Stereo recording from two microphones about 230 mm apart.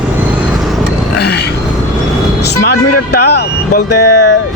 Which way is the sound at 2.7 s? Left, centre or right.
Left.